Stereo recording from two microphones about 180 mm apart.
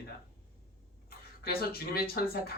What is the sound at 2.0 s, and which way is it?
Speech, 60° left (ahead or behind).